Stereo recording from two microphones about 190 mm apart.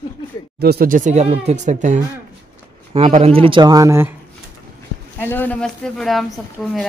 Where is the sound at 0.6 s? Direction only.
55° right (ahead or behind); by 4.1 s 15° right (ahead or behind).